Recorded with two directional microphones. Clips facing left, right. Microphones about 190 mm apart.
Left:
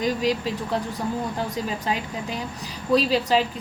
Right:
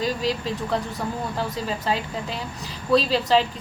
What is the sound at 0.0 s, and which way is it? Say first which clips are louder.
A woman's voice: left 2 dB; 10° left (ahead or behind).